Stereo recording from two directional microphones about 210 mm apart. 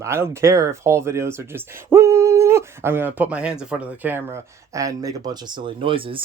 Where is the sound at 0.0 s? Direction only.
15° right (ahead or behind).